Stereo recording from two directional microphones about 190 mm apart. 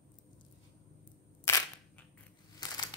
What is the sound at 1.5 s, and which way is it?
Single-lens reflex camera, 15° left (ahead or behind).